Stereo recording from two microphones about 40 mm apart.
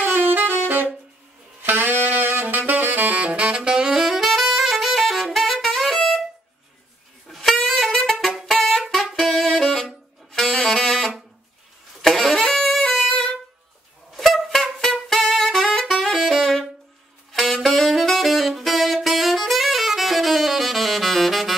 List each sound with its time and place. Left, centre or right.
0.0 s saxophone: right
2.4 s saxophone: right
3.2 s saxophone: right
3.9 s saxophone: centre
7.2 s saxophone: centre
8.1 s music: centre
8.5 s music: centre
8.9 s saxophone: centre
12.0 s music: centre
14.1 s music: centre
15.1 s saxophone: centre